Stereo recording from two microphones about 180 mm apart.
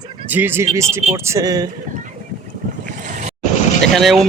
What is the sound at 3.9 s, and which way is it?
Speech, centre (ahead or behind).